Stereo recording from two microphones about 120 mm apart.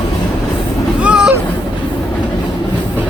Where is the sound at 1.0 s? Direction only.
10° right (ahead or behind).